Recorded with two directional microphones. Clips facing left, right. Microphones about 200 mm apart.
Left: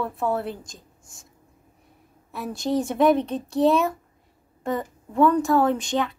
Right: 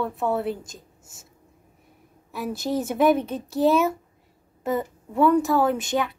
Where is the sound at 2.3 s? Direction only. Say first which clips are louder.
Left 1 dB; centre (ahead or behind).